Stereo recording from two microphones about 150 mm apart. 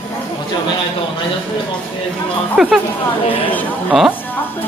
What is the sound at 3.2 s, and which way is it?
Speech, 35° left (ahead or behind).